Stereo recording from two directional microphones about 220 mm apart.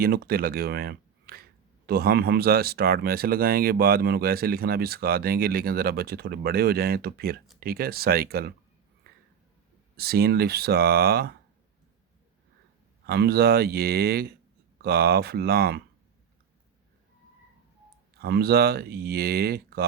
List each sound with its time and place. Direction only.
0.0 s speech: 45° right (ahead or behind)
10.0 s speech: 45° right (ahead or behind)
13.1 s speech: 45° right (ahead or behind)
18.2 s speech: 45° right (ahead or behind)